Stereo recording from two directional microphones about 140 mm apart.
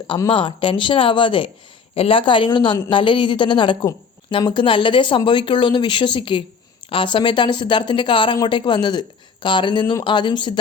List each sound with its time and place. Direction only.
0.3 s speech: 35° left (ahead or behind)